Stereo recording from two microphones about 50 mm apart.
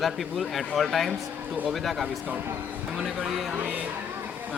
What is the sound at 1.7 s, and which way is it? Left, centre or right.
Speech, centre.